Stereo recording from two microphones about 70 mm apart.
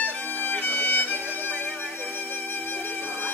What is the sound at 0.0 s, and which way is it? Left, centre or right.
Music, left.